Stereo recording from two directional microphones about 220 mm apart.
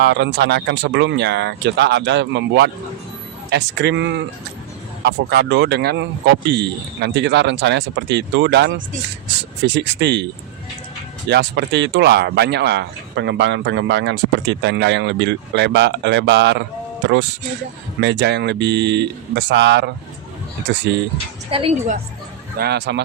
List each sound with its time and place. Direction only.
0.0 s speech: 50° right (ahead or behind)
11.3 s speech: 50° right (ahead or behind)
18.0 s speech: 55° right (ahead or behind)
21.5 s a woman's voice: 25° right (ahead or behind)
22.5 s speech: 50° right (ahead or behind)